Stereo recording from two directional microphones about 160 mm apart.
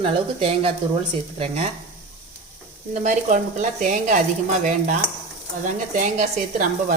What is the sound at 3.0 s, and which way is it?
A woman's voice, 50° right (ahead or behind).